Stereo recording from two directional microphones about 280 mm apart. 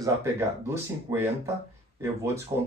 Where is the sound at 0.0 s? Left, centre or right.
Centre.